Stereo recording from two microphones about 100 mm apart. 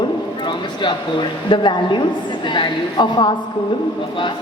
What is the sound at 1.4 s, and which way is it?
A woman's voice, 50° left (ahead or behind).